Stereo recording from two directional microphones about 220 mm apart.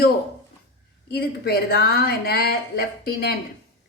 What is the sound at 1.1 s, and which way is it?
A woman's voice, 45° left (ahead or behind).